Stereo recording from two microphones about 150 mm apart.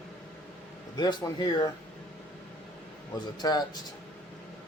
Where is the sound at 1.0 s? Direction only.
30° left (ahead or behind).